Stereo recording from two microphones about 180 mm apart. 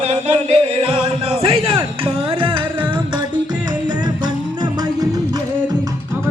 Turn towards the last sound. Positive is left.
turn(degrees=-20)  # may be behind; listen again after turning